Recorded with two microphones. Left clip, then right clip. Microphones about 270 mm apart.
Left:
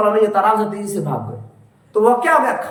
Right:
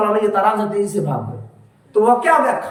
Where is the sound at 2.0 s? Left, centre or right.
Centre.